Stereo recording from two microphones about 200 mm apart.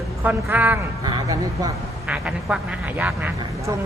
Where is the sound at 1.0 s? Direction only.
20° right (ahead or behind).